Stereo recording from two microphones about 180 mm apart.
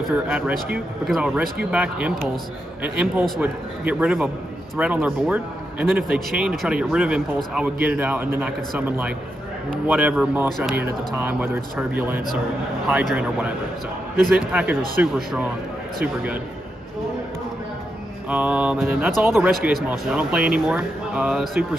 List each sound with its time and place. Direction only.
0.3 s a man's voice: 5° right (ahead or behind)
18.3 s a man's voice: 5° right (ahead or behind)